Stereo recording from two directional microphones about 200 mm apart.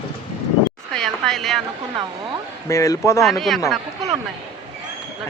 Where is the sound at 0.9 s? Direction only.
Centre (ahead or behind).